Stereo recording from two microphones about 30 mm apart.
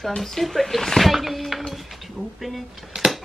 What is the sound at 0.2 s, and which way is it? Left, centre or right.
Speech, centre.